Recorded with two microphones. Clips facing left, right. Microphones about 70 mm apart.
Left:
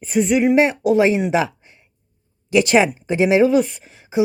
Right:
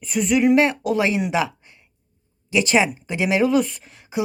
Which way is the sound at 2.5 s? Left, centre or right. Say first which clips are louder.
Left 4 dB; left.